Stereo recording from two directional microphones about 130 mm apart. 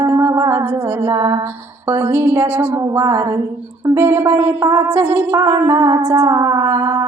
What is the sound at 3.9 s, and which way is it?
Music, 20° right (ahead or behind).